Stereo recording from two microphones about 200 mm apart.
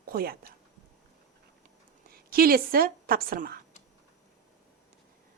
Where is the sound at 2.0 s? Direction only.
45° right (ahead or behind).